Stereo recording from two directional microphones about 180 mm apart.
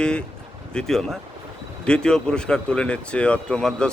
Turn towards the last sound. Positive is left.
turn(degrees=5)  # may be behind; listen again after turning